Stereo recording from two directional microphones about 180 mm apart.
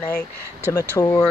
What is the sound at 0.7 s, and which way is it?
Speech, 20° left (ahead or behind).